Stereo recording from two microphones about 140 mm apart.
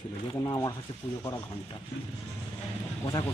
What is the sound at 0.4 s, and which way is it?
Speech, 30° left (ahead or behind).